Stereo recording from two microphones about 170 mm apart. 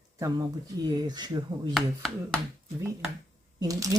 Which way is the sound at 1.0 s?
25° right (ahead or behind).